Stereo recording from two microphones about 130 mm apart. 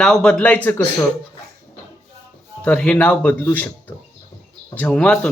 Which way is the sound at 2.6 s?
10° left (ahead or behind).